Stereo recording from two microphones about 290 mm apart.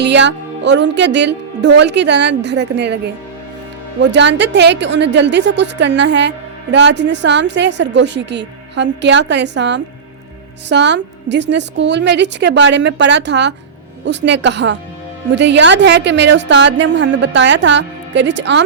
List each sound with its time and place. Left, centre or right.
0.0 s a woman's voice: right
4.0 s a woman's voice: right